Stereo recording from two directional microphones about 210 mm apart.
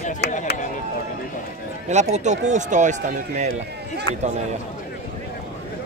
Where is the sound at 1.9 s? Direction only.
35° right (ahead or behind).